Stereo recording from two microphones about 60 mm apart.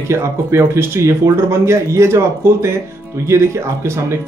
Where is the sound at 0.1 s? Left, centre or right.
Right.